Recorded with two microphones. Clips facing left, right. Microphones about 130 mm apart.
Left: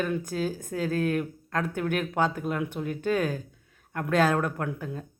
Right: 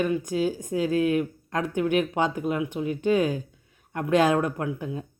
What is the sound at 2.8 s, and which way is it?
Speech, 45° left (ahead or behind).